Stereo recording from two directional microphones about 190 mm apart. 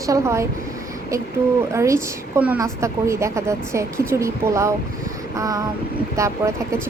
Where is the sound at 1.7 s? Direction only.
15° right (ahead or behind).